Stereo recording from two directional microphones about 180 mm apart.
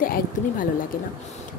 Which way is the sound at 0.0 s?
50° left (ahead or behind).